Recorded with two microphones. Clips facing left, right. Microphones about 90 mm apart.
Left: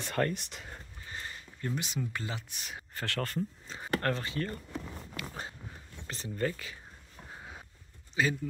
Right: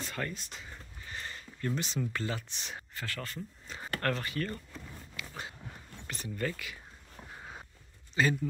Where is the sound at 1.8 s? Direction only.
15° left (ahead or behind).